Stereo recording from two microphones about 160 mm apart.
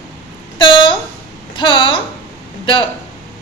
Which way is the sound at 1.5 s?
30° left (ahead or behind).